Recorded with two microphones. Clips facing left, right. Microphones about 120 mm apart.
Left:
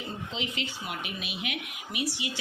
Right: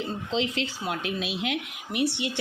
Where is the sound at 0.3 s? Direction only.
90° right.